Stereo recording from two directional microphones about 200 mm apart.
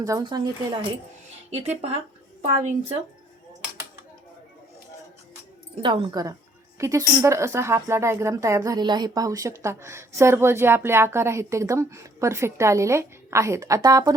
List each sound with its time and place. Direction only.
0.0 s speech: 20° right (ahead or behind)
1.5 s a woman's voice: 30° right (ahead or behind)
5.8 s a woman's voice: 25° right (ahead or behind)